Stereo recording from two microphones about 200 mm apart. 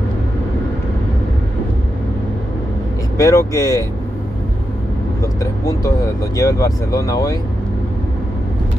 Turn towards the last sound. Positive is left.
turn(degrees=15)  # may be behind; listen again after turning